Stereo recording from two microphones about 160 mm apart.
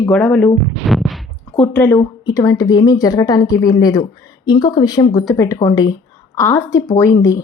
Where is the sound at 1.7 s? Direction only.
10° left (ahead or behind).